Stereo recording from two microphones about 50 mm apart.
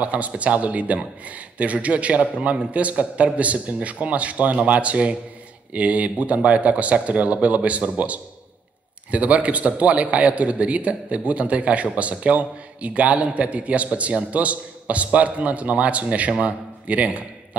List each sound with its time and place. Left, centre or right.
0.0 s a man's voice: right